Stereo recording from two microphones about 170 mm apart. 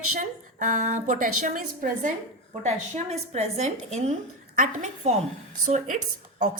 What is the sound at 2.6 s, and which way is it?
A woman's voice, 40° right (ahead or behind).